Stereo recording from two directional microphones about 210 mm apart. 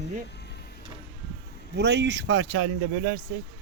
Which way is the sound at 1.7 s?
55° right (ahead or behind).